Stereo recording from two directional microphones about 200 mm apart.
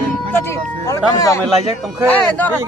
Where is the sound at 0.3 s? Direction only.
15° left (ahead or behind).